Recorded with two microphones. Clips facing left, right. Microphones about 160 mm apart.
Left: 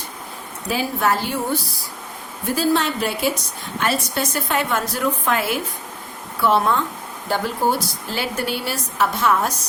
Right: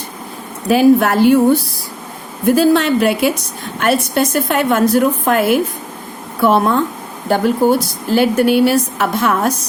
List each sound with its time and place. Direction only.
0.7 s a woman's voice: 60° right (ahead or behind)
2.4 s a woman's voice: 60° right (ahead or behind)